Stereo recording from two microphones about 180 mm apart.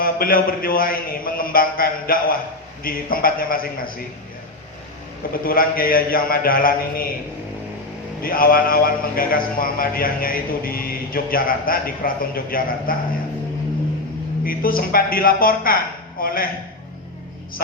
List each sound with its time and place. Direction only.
0.0 s a man's voice: 55° left (ahead or behind)
5.5 s a man's voice: 55° left (ahead or behind)
8.2 s a man's voice: 55° left (ahead or behind)
14.4 s a man's voice: 55° left (ahead or behind)